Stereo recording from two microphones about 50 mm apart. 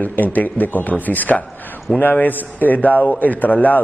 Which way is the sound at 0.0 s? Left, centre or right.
Left.